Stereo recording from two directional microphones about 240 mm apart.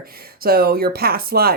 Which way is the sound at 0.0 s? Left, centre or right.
Right.